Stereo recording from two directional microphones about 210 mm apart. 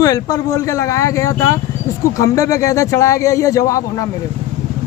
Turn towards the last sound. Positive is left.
turn(degrees=15)  # may be behind; listen again after turning